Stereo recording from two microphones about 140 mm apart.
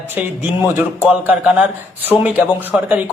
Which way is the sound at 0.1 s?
15° right (ahead or behind).